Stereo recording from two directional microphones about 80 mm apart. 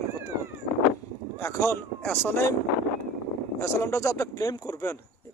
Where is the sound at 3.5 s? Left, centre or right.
Left.